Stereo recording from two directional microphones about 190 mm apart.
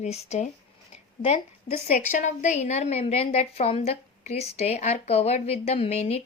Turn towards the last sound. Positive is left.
turn(degrees=35)  # may be behind; listen again after turning